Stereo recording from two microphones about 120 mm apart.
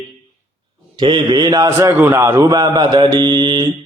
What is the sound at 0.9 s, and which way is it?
A man's voice, 45° right (ahead or behind).